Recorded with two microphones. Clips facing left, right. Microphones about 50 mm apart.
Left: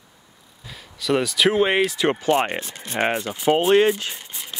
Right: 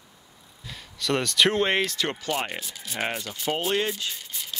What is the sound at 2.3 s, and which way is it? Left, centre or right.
Speech, left.